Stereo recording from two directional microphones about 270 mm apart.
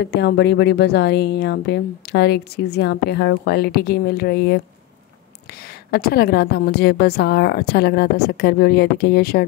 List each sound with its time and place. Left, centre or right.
0.0 s a woman's voice: left